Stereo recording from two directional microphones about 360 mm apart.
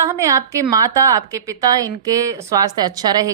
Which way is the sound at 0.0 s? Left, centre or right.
Centre.